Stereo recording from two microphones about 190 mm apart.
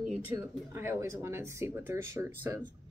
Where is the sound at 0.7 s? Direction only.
15° right (ahead or behind).